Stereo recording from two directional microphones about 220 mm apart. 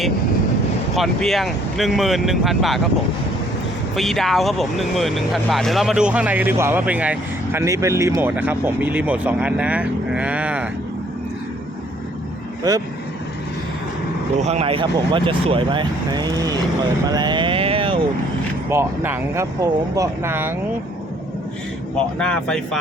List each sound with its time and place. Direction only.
0.9 s speech: centre (ahead or behind)
3.9 s speech: centre (ahead or behind)
12.7 s speech: 15° right (ahead or behind)
14.4 s speech: 30° right (ahead or behind)
17.1 s a sound: 20° right (ahead or behind)
18.7 s speech: 10° right (ahead or behind)
21.9 s speech: 5° left (ahead or behind)